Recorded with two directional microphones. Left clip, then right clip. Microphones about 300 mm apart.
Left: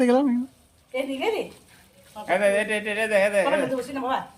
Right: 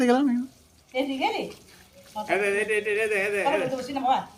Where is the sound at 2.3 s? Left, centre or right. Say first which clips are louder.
Left 3 dB; centre.